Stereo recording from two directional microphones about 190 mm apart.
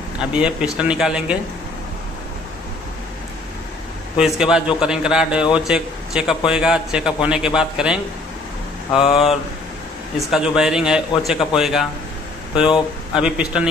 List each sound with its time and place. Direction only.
0.2 s a man's voice: 5° right (ahead or behind)
4.2 s a man's voice: 5° right (ahead or behind)
8.9 s speech: 30° left (ahead or behind)
10.1 s a man's voice: centre (ahead or behind)
13.1 s a man's voice: 5° right (ahead or behind)